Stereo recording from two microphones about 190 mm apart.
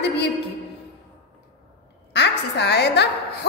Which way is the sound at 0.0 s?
60° left (ahead or behind).